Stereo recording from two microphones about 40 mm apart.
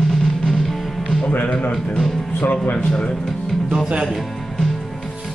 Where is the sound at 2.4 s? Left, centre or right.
Left.